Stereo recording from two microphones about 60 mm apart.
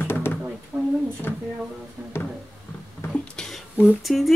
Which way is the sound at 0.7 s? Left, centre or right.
Right.